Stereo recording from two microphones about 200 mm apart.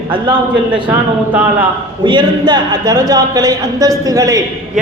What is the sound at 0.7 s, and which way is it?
Speech, 5° right (ahead or behind).